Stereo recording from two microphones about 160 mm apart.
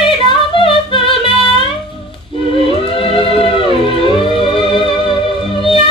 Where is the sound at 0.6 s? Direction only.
35° left (ahead or behind).